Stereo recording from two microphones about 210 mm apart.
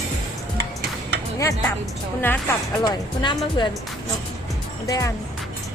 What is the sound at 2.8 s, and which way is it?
Speech, 20° left (ahead or behind).